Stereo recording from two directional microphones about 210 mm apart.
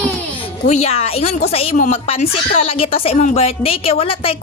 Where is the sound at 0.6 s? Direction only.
30° left (ahead or behind).